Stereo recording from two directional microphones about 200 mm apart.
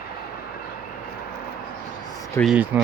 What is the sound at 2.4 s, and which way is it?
Speech, 5° right (ahead or behind).